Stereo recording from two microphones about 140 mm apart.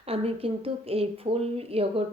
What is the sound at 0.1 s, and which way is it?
A woman's voice, 45° right (ahead or behind).